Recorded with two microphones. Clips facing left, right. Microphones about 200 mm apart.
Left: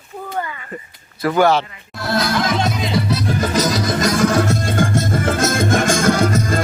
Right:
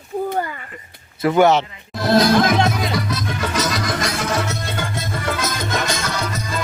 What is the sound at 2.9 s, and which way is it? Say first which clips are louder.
Music: left 4 dB; 30° left (ahead or behind).